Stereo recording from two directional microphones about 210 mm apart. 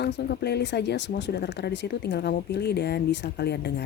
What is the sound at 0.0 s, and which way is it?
Speech, 50° left (ahead or behind).